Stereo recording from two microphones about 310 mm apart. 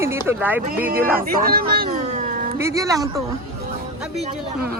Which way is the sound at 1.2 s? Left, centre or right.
Right.